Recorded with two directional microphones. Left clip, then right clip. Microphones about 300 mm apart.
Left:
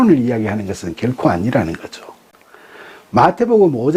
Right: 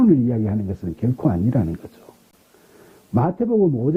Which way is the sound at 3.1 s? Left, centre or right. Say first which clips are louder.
Left 9 dB; centre.